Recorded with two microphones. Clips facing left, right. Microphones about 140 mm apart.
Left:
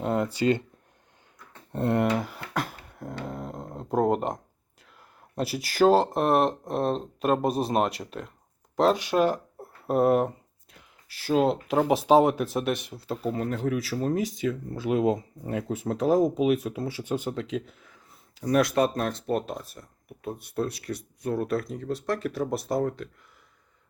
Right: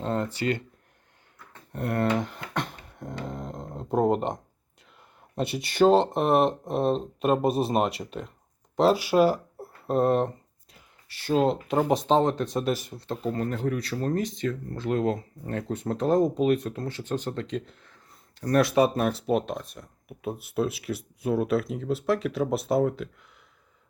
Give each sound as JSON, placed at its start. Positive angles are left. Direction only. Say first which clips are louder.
{"t": 0.0, "sound": "speech", "louder": "left 3 dB", "side_deg": 10}
{"t": 1.7, "sound": "speech", "louder": "left 3 dB", "side_deg": 25}
{"t": 2.0, "sound": "a sound", "louder": "even", "side_deg": 5}
{"t": 5.3, "sound": "speech", "louder": "even", "side_deg": 0}